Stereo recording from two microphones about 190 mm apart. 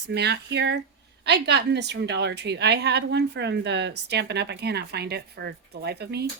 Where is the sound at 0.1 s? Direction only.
60° right (ahead or behind).